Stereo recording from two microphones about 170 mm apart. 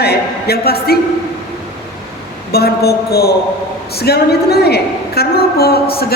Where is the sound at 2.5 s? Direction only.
70° left (ahead or behind).